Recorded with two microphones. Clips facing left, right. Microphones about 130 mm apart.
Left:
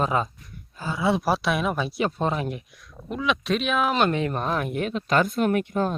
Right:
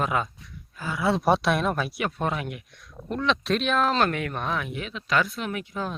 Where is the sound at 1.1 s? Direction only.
Centre (ahead or behind).